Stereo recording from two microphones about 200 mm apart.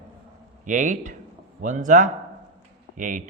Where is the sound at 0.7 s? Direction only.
40° right (ahead or behind).